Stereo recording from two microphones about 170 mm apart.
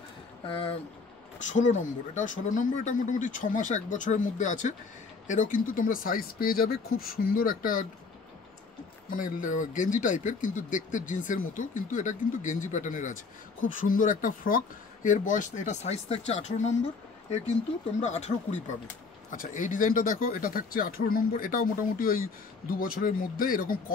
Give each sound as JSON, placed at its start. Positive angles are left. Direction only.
{"t": 0.5, "sound": "speech", "side_deg": 30}
{"t": 1.5, "sound": "speech", "side_deg": 45}
{"t": 9.1, "sound": "speech", "side_deg": 50}
{"t": 18.0, "sound": "speech", "side_deg": 40}
{"t": 19.3, "sound": "speech", "side_deg": 50}